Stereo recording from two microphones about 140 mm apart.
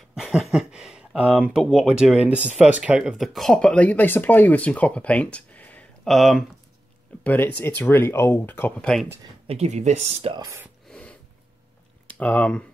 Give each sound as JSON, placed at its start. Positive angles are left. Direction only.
{"t": 0.1, "sound": "a sound", "side_deg": -5}
{"t": 1.6, "sound": "speech", "side_deg": 0}
{"t": 7.2, "sound": "speech", "side_deg": 10}
{"t": 9.5, "sound": "speech", "side_deg": -50}
{"t": 10.9, "sound": "a sound", "side_deg": 10}
{"t": 12.2, "sound": "speech", "side_deg": 10}